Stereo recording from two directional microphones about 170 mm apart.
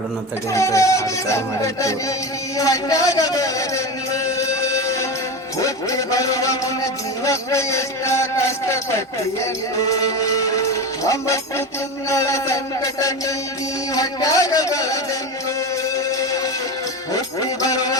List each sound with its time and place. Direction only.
0.5 s a man's voice: 15° left (ahead or behind)
2.6 s a sound: 20° left (ahead or behind)
5.5 s a man's voice: 20° left (ahead or behind)
9.9 s music: 20° left (ahead or behind)
16.0 s music: 20° left (ahead or behind)